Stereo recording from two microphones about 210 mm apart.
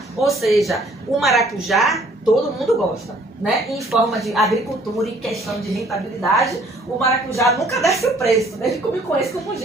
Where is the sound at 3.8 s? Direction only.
Centre (ahead or behind).